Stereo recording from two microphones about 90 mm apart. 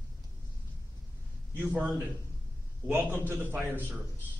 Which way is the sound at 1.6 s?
15° right (ahead or behind).